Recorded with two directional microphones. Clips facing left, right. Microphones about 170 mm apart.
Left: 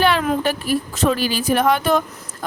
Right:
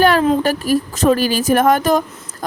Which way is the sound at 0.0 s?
45° right (ahead or behind).